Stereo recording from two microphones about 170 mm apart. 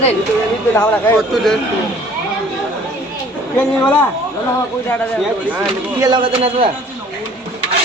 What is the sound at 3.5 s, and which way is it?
Speech, 10° left (ahead or behind).